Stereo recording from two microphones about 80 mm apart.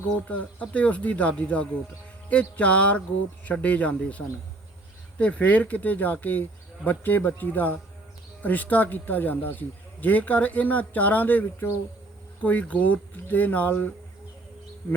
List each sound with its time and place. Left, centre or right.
0.3 s speech: centre